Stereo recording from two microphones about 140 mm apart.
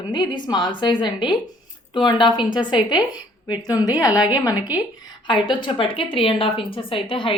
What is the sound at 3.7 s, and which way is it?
A woman's voice, 25° left (ahead or behind).